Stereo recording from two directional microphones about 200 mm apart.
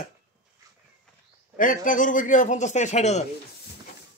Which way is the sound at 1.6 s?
45° left (ahead or behind).